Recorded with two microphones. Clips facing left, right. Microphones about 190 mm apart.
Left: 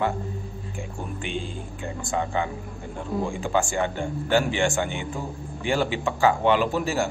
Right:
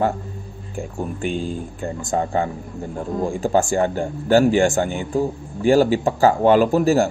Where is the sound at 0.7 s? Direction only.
40° right (ahead or behind).